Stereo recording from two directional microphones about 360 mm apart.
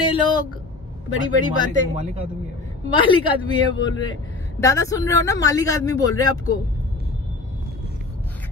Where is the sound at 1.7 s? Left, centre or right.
Centre.